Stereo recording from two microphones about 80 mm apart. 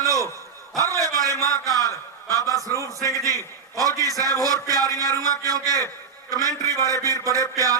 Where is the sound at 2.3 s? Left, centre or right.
Right.